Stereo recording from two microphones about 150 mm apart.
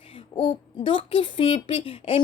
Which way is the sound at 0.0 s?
35° left (ahead or behind).